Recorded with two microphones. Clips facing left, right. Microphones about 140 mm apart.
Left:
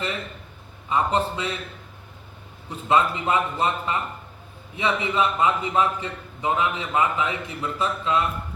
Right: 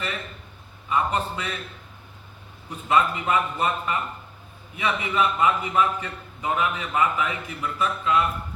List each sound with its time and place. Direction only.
0.9 s a man's voice: 25° left (ahead or behind)
2.6 s a man's voice: 25° left (ahead or behind)